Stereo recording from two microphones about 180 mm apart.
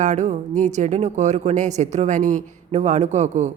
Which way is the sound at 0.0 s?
40° right (ahead or behind).